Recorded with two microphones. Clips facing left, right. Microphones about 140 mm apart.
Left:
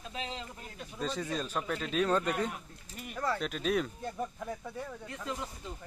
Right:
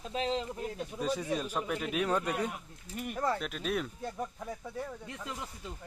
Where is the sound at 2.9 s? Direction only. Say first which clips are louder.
Right 5 dB; 55° right (ahead or behind).